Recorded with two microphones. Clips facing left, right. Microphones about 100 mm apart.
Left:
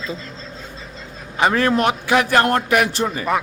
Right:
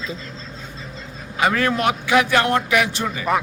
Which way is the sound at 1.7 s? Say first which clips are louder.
Left 1 dB; 45° left (ahead or behind).